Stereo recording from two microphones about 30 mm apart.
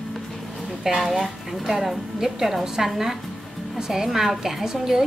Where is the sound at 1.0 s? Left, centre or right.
Centre.